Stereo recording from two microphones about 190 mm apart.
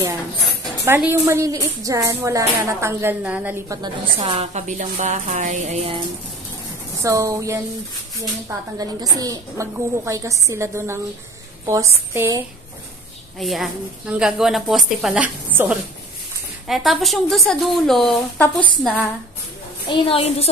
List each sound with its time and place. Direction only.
0.8 s a woman's voice: 15° right (ahead or behind)
4.2 s a woman's voice: 35° right (ahead or behind)
7.0 s a woman's voice: 15° right (ahead or behind)
13.4 s a woman's voice: centre (ahead or behind)
19.9 s a woman's voice: 30° left (ahead or behind)